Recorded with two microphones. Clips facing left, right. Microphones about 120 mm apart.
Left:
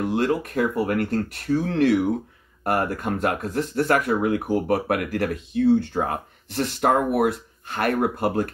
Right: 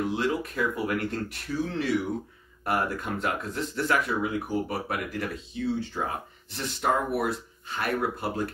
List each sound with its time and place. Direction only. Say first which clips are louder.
0.0 s speech: left 5 dB; 55° left (ahead or behind)
2.6 s speech: left 4 dB; 50° left (ahead or behind)